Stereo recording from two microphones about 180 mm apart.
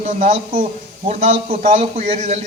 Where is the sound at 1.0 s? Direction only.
35° right (ahead or behind).